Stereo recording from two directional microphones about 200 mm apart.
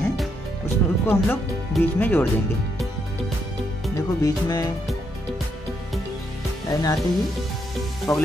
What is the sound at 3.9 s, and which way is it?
Speech, 20° left (ahead or behind).